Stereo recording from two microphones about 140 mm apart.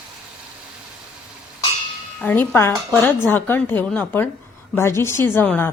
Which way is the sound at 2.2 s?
15° left (ahead or behind).